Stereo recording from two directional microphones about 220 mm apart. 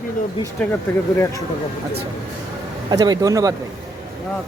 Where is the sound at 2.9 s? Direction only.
15° right (ahead or behind).